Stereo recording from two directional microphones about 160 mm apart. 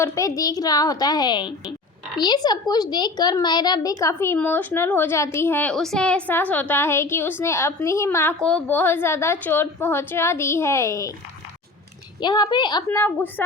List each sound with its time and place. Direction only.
0.0 s a woman's voice: 20° left (ahead or behind)
12.2 s a woman's voice: 25° left (ahead or behind)
13.0 s a child's voice: 10° left (ahead or behind)